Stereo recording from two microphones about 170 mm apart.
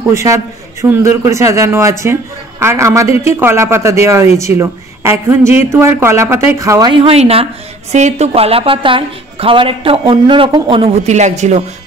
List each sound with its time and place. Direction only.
0.1 s a man's voice: 15° right (ahead or behind); by 11.6 s 45° right (ahead or behind)